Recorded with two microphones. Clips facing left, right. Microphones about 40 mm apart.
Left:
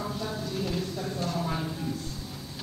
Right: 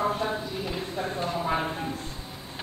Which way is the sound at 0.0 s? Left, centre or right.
Right.